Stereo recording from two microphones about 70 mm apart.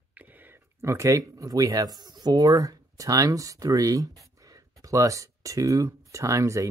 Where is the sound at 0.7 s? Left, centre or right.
Right.